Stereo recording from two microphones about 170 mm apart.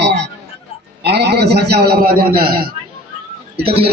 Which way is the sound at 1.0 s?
75° right (ahead or behind).